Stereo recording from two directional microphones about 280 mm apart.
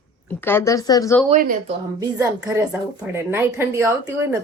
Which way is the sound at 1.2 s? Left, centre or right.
Right.